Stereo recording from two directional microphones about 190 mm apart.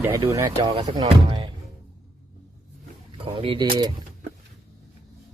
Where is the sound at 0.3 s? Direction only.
20° right (ahead or behind).